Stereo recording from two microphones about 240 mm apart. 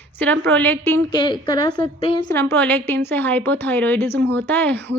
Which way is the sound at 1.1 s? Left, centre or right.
Centre.